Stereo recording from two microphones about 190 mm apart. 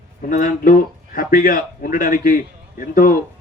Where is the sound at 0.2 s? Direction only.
45° left (ahead or behind).